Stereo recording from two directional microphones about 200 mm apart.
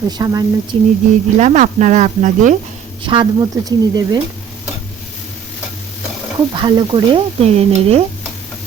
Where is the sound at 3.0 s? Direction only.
25° right (ahead or behind).